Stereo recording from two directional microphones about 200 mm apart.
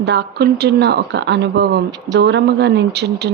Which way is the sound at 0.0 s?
60° right (ahead or behind).